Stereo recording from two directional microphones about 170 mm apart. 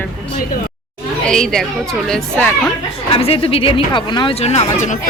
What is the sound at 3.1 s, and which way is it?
Speech, 35° left (ahead or behind).